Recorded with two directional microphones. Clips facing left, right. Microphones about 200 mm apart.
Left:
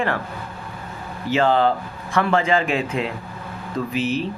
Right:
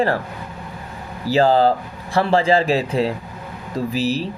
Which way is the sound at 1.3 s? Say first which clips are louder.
Right 3 dB; 35° right (ahead or behind).